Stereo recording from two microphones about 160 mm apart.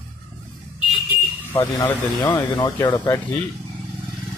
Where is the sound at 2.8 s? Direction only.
15° left (ahead or behind).